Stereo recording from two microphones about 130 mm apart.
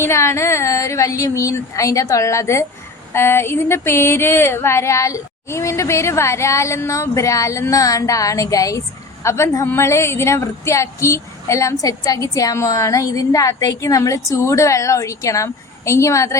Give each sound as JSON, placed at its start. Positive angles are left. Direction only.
{"t": 0.0, "sound": "a woman's voice", "side_deg": 20}